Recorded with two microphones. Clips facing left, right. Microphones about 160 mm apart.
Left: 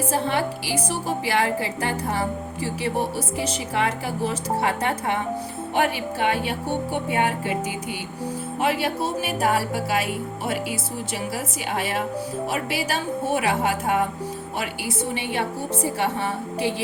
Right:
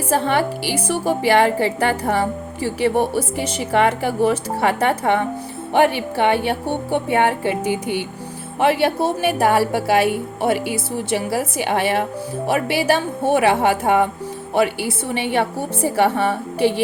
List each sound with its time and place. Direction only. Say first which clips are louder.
0.1 s a woman's voice: right 10 dB; 65° right (ahead or behind)
8.5 s a woman's voice: right 7 dB; 65° right (ahead or behind)